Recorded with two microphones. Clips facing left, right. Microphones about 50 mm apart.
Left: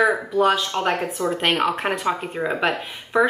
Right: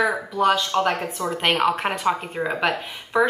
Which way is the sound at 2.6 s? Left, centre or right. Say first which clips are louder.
Even; centre.